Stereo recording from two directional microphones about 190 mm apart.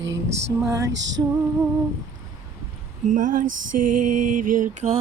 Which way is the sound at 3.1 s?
45° right (ahead or behind).